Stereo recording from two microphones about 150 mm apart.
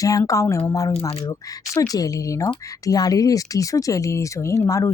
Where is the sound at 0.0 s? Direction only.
25° left (ahead or behind).